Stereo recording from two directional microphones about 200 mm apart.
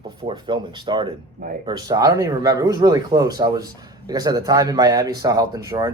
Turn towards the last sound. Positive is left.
turn(degrees=-20)  # may be behind; listen again after turning